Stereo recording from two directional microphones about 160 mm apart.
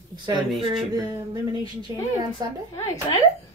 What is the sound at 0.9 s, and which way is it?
Speech, 25° right (ahead or behind).